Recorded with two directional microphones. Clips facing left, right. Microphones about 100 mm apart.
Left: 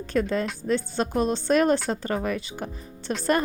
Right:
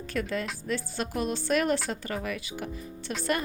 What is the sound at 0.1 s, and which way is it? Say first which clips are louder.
Speech: left 6 dB; 30° left (ahead or behind).